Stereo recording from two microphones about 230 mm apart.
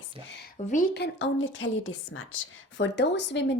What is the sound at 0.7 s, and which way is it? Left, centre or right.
A woman's voice, left.